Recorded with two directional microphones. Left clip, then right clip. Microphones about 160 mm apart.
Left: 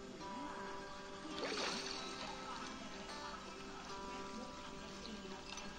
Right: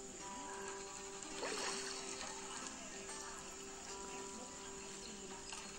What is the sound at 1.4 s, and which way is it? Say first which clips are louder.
Music: left 1 dB; 15° left (ahead or behind).